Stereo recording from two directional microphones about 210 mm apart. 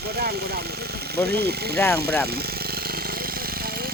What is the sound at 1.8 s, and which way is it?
Speech, 10° left (ahead or behind).